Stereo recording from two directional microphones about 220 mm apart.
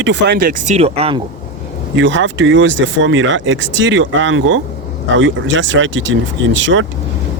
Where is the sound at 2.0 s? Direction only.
60° right (ahead or behind).